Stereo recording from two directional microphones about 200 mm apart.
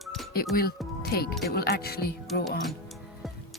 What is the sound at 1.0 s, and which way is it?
Speech, 50° left (ahead or behind).